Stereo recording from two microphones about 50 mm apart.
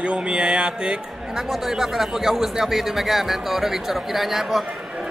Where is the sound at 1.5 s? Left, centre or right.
Centre.